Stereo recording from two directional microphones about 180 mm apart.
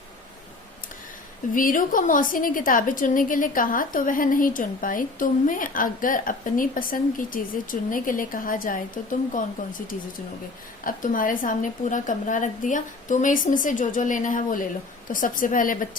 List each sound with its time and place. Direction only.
1.5 s a woman's voice: 50° left (ahead or behind)